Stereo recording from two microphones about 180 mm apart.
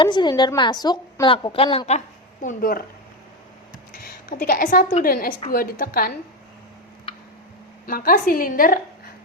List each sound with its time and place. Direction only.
0.0 s a woman's voice: 25° left (ahead or behind)
2.4 s a woman's voice: 50° left (ahead or behind)
3.9 s a woman's voice: 50° left (ahead or behind)
7.9 s a woman's voice: 55° left (ahead or behind)